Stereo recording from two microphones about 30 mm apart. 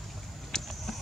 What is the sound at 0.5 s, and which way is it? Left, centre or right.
Vehicle, left.